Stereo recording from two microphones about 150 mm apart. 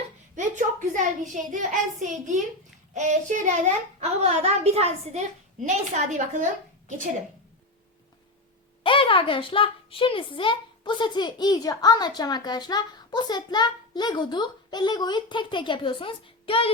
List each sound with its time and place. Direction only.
0.3 s a child's voice: 55° right (ahead or behind)
8.8 s a woman's voice: 35° left (ahead or behind)